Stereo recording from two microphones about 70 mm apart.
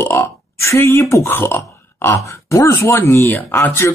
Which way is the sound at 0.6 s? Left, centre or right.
Left.